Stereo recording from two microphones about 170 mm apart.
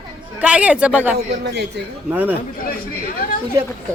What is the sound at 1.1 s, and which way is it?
Speech, 80° right.